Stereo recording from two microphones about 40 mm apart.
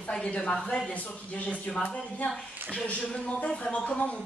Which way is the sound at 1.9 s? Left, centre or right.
Left.